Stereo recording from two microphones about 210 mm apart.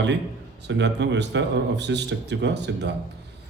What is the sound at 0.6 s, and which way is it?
A man's voice, 55° right (ahead or behind).